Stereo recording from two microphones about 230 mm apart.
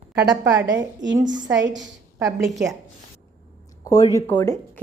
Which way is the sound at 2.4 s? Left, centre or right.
Centre.